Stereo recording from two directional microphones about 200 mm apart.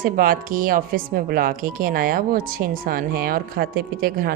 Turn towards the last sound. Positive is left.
turn(degrees=-50)  # may be behind; listen again after turning